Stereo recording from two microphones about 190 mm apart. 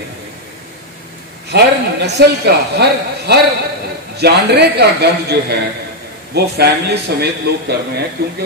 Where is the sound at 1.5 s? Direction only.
60° right (ahead or behind).